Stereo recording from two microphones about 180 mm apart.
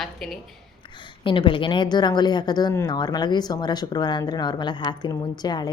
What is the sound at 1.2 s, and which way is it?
Speech, 25° left (ahead or behind).